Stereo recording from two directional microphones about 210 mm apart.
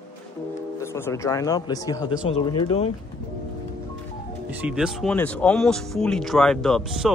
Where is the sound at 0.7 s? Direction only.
10° left (ahead or behind).